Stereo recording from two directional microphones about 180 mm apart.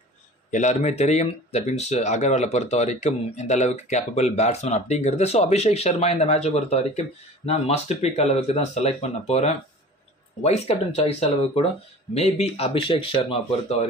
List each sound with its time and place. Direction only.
0.5 s speech: 40° left (ahead or behind)